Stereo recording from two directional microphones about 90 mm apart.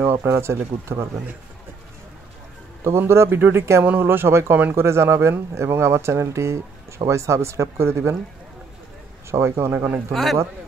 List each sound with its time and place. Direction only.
0.0 s speech: 25° right (ahead or behind)
2.8 s speech: 30° right (ahead or behind)
9.3 s speech: 30° right (ahead or behind)
10.1 s speech: centre (ahead or behind)